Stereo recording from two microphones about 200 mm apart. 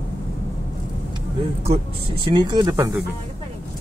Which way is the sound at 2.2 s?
20° right (ahead or behind).